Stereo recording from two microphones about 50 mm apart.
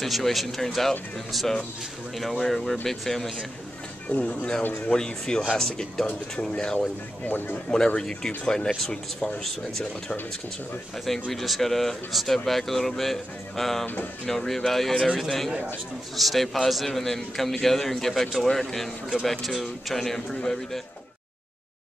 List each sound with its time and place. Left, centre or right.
0.0 s a man's voice: centre
4.1 s speech: left
7.2 s speech: left
7.7 s a man's voice: centre